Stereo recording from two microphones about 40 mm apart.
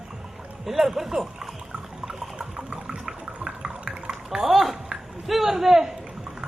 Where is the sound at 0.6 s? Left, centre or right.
Centre.